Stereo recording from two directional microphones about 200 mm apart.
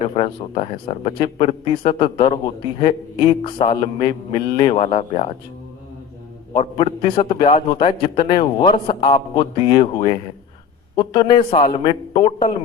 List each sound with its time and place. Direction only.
0.0 s a man's voice: 30° left (ahead or behind)
6.5 s a man's voice: 25° left (ahead or behind)